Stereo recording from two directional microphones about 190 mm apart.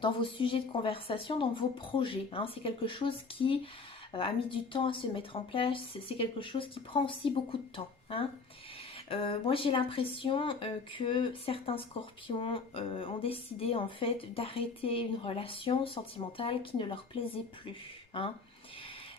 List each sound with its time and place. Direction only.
0.0 s a woman's voice: 25° left (ahead or behind)